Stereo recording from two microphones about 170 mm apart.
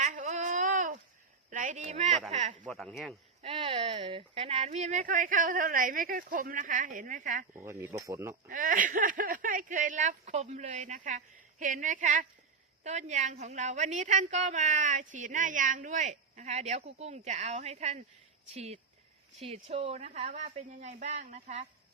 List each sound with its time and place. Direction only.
0.0 s a sound: 45° right (ahead or behind)
2.6 s speech: 5° left (ahead or behind)
3.4 s a woman's voice: 35° right (ahead or behind)
7.5 s speech: 15° right (ahead or behind)
8.4 s a woman's voice: 55° right (ahead or behind)